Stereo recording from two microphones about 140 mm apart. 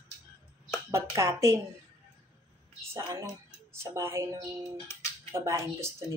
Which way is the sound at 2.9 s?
20° right (ahead or behind).